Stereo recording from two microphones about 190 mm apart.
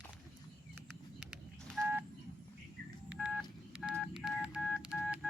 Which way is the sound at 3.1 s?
5° right (ahead or behind).